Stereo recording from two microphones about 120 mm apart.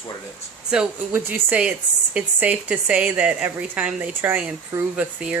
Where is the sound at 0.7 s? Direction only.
5° right (ahead or behind).